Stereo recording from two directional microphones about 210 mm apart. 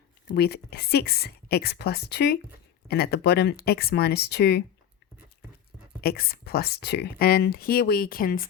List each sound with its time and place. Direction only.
0.3 s speech: 50° left (ahead or behind)
6.0 s speech: 45° left (ahead or behind)